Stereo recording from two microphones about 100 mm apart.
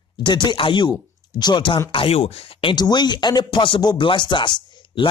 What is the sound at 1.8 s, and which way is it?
Speech, 65° left (ahead or behind).